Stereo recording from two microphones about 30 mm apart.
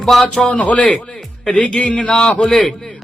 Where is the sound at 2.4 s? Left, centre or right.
Centre.